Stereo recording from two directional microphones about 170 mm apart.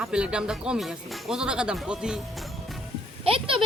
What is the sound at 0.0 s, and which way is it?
Speech, 5° right (ahead or behind).